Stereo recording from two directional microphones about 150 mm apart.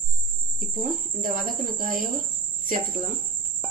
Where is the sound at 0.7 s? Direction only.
65° right (ahead or behind).